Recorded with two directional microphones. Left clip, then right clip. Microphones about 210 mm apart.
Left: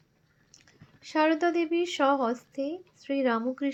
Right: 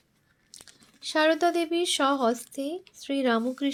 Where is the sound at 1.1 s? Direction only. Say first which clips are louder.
Right 2 dB; 35° right (ahead or behind).